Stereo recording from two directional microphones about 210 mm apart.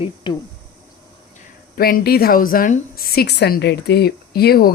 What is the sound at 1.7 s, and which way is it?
A woman's voice, 45° left (ahead or behind).